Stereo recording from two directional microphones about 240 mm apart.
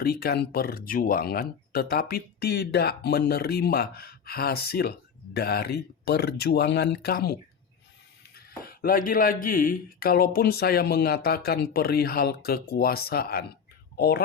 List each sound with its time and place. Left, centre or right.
0.0 s speech: left
8.4 s speech: left